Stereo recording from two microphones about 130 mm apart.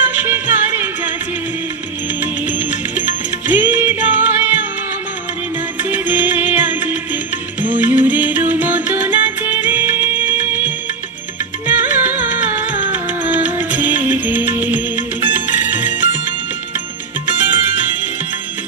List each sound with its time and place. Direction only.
0.0 s music: 15° right (ahead or behind)
2.2 s music: 15° right (ahead or behind)
5.9 s music: 15° right (ahead or behind)
11.7 s music: 15° right (ahead or behind)
17.4 s music: 15° right (ahead or behind)